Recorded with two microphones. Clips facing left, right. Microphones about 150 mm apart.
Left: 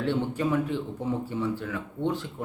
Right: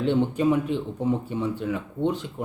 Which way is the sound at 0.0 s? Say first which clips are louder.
Right 5 dB; 20° right (ahead or behind).